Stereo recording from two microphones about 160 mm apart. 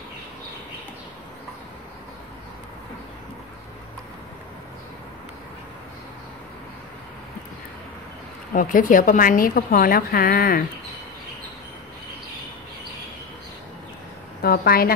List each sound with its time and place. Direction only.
8.5 s a woman's voice: 60° left (ahead or behind)
14.4 s speech: 70° left (ahead or behind)